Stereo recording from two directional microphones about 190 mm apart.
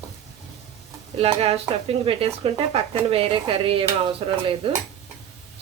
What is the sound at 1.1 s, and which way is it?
A woman's voice, 30° right (ahead or behind).